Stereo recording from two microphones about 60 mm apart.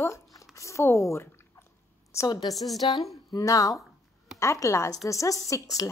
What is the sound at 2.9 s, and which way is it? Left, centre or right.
A woman's voice, left.